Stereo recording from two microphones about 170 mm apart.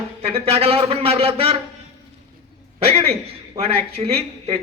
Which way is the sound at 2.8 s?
35° right (ahead or behind).